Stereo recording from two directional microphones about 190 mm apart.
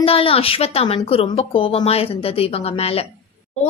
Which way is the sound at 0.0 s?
30° left (ahead or behind).